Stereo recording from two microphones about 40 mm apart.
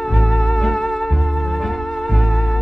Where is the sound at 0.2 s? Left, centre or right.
Centre.